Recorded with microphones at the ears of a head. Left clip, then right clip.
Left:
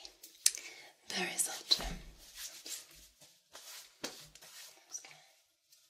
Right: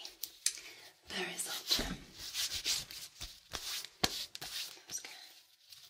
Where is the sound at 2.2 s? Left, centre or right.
Right.